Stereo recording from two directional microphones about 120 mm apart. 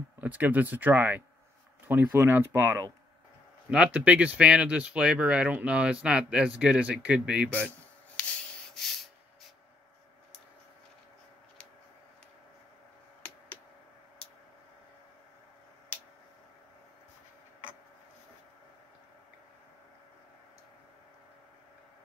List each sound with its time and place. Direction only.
0.2 s speech: 15° right (ahead or behind)
8.2 s rub: 5° left (ahead or behind)